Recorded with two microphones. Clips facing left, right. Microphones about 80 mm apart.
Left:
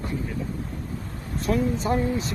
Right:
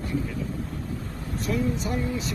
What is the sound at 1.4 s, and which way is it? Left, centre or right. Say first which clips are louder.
Speech: left 3 dB; left.